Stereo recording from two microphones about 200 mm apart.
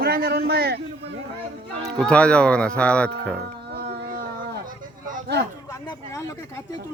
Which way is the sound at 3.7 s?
55° right (ahead or behind).